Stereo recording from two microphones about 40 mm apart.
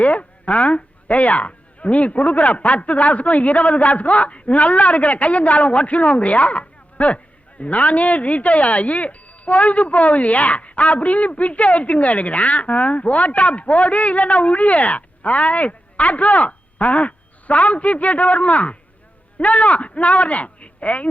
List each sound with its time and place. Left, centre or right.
0.0 s speech: left